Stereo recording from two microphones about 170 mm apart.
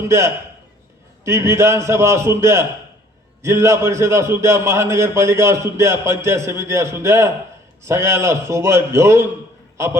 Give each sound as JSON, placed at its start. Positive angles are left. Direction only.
{"t": 1.2, "sound": "a man's voice", "side_deg": -15}